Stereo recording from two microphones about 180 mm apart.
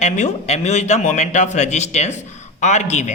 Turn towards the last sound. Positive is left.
turn(degrees=40)  # may be behind; listen again after turning